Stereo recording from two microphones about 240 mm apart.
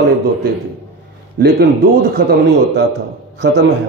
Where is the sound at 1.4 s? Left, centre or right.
Right.